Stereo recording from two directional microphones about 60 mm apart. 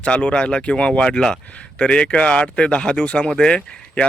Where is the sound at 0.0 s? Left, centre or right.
Centre.